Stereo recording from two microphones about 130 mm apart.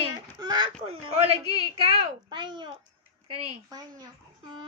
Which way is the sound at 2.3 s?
35° right (ahead or behind).